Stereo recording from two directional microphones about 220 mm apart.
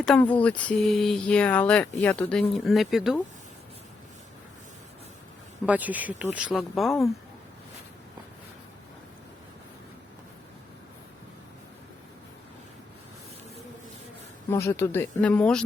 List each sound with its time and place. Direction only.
0.0 s speech: centre (ahead or behind)
5.6 s speech: 5° right (ahead or behind)
14.5 s speech: 10° left (ahead or behind)